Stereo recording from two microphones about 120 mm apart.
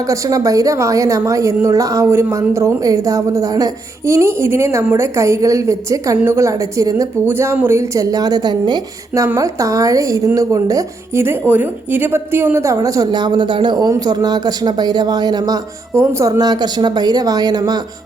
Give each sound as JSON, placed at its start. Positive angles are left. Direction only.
{"t": 0.1, "sound": "a woman's voice", "side_deg": -30}